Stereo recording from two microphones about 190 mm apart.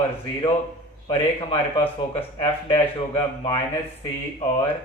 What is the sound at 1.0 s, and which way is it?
Speech, 30° left (ahead or behind).